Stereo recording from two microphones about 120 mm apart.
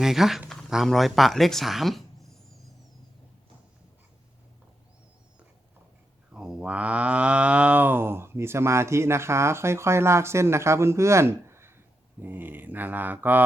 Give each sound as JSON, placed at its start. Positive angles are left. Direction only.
{"t": 0.0, "sound": "speech", "side_deg": -5}
{"t": 6.3, "sound": "cattle", "side_deg": -5}
{"t": 12.2, "sound": "a sound", "side_deg": -15}